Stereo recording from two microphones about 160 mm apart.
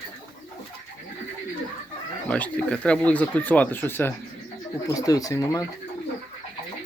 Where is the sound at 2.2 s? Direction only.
10° left (ahead or behind).